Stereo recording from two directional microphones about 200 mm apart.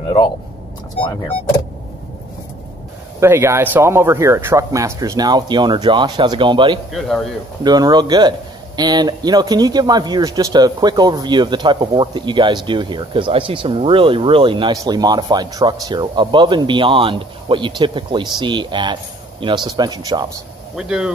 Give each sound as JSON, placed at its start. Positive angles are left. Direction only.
{"t": 1.0, "sound": "speech", "side_deg": 5}
{"t": 3.2, "sound": "speech", "side_deg": -15}
{"t": 6.9, "sound": "speech", "side_deg": 0}
{"t": 7.6, "sound": "speech", "side_deg": -20}
{"t": 20.7, "sound": "speech", "side_deg": -5}